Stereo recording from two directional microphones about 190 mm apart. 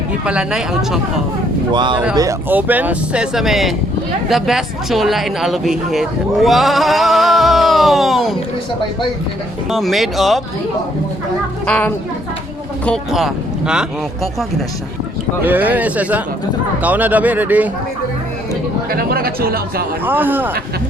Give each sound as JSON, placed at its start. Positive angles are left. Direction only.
{"t": 0.3, "sound": "speech", "side_deg": -5}
{"t": 1.7, "sound": "speech", "side_deg": -25}
{"t": 2.1, "sound": "speech", "side_deg": -15}
{"t": 9.6, "sound": "speech", "side_deg": 0}
{"t": 11.6, "sound": "speech", "side_deg": 5}
{"t": 15.4, "sound": "speech", "side_deg": -10}
{"t": 18.9, "sound": "speech", "side_deg": -50}
{"t": 20.1, "sound": "speech", "side_deg": -10}